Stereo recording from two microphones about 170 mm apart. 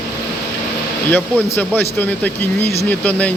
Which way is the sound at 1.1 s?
10° left (ahead or behind).